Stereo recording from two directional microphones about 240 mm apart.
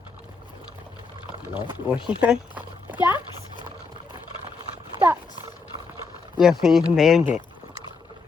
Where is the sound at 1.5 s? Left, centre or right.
Centre.